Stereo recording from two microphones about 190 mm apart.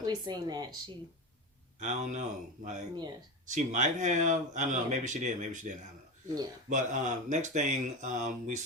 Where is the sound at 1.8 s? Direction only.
40° right (ahead or behind).